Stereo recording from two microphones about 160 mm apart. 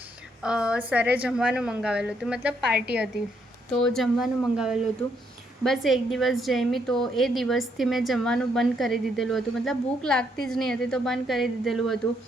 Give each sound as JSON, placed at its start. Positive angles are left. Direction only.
{"t": 0.4, "sound": "a woman's voice", "side_deg": -5}
{"t": 3.8, "sound": "a woman's voice", "side_deg": 5}